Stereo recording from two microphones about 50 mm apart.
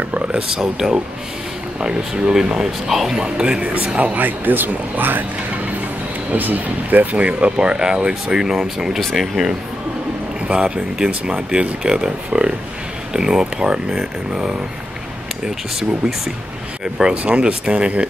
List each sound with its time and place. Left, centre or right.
0.5 s speech: centre
3.3 s speech: centre; by 5.2 s right
6.3 s speech: right; by 9.5 s centre
10.5 s speech: right
16.8 s speech: centre